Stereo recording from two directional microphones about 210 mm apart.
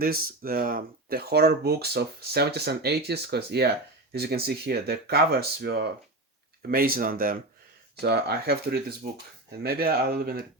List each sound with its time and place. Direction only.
0.0 s speech: 45° right (ahead or behind)